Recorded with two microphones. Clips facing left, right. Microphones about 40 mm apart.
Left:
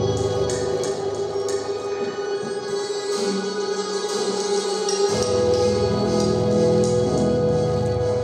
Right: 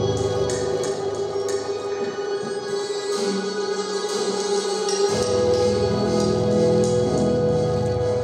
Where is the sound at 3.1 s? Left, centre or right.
Right.